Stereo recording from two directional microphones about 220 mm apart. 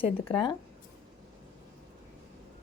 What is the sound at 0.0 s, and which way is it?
Speech, 25° left (ahead or behind).